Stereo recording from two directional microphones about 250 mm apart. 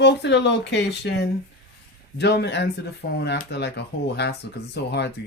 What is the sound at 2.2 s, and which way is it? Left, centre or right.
Speech, left.